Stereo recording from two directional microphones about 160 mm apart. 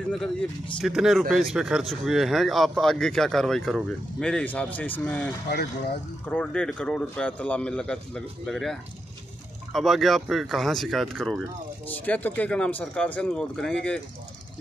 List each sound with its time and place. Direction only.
0.7 s speech: centre (ahead or behind)
6.3 s a man's voice: 5° left (ahead or behind)